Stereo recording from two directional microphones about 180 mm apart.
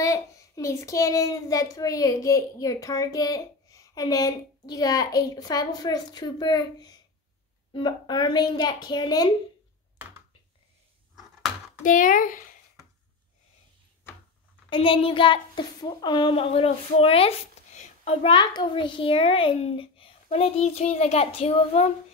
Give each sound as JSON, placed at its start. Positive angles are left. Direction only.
{"t": 0.0, "sound": "a child's voice", "side_deg": 15}
{"t": 11.8, "sound": "speech", "side_deg": 45}
{"t": 14.7, "sound": "a woman's voice", "side_deg": 30}